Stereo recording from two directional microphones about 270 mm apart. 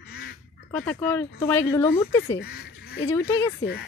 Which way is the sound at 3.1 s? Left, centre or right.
Centre.